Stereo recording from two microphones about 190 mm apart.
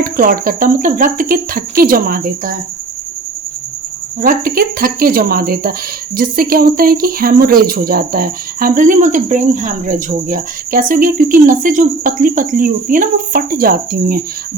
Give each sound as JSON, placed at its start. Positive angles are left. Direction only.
{"t": 0.0, "sound": "speech", "side_deg": -50}
{"t": 4.2, "sound": "speech", "side_deg": -45}